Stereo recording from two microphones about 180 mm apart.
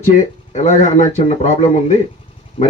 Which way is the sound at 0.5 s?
40° left (ahead or behind).